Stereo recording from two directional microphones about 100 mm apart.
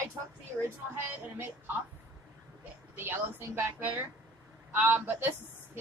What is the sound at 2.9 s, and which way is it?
A woman's voice, 20° right (ahead or behind).